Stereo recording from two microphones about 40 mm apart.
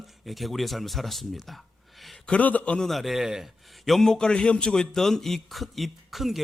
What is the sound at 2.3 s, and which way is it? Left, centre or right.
Speech, left.